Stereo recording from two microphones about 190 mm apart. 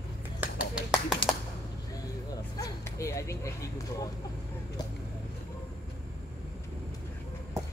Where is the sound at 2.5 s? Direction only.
15° left (ahead or behind).